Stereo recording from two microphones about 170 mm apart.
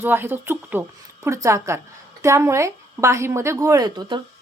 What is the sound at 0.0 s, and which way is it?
A woman's voice, 10° right (ahead or behind).